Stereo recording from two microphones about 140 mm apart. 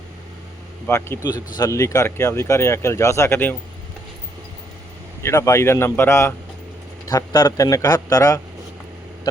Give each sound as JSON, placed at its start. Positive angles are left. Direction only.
{"t": 0.9, "sound": "speech", "side_deg": 15}
{"t": 1.3, "sound": "speech", "side_deg": 30}
{"t": 5.2, "sound": "speech", "side_deg": 20}